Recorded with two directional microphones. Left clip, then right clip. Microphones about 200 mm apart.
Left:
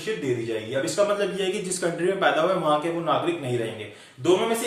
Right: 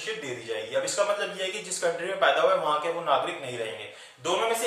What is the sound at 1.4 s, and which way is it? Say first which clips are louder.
A man's voice: left 4 dB; 10° left (ahead or behind).